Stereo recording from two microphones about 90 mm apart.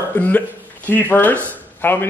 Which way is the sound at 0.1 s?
20° left (ahead or behind).